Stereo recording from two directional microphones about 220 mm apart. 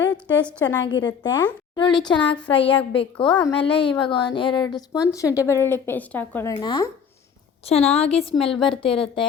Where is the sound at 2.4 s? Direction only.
25° left (ahead or behind).